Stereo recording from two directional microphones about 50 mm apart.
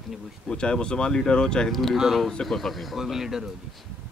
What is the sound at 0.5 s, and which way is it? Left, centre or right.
Speech, centre.